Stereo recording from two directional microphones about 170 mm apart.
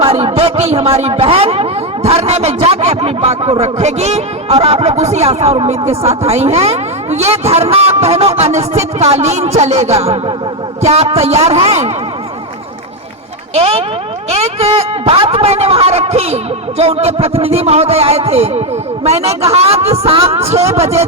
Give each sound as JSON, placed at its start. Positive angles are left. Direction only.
{"t": 0.0, "sound": "speech", "side_deg": -35}
{"t": 13.5, "sound": "speech", "side_deg": -35}